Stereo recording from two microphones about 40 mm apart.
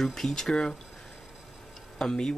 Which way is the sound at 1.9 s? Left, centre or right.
Centre.